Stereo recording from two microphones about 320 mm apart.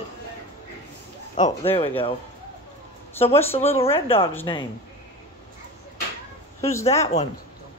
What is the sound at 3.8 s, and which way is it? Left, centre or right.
Speech, centre.